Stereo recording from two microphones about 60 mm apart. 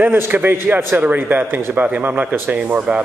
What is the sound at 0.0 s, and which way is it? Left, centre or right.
A man's voice, right.